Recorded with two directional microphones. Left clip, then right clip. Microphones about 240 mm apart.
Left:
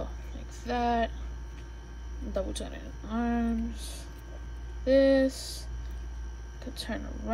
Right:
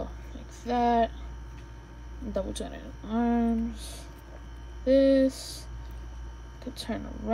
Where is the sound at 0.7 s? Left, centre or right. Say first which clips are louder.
Right 4 dB; centre.